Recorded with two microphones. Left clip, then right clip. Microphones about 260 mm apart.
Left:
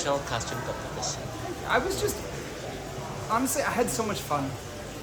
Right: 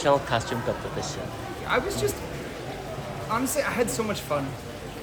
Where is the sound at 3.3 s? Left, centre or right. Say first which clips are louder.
Even; centre.